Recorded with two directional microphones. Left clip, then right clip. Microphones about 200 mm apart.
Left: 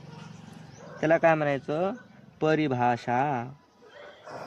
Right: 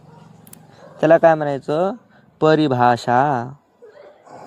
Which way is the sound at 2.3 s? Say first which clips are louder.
Right 10 dB; 20° right (ahead or behind).